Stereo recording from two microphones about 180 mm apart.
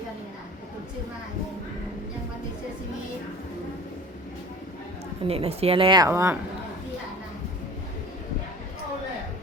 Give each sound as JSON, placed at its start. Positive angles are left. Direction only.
{"t": 5.2, "sound": "a woman's voice", "side_deg": -35}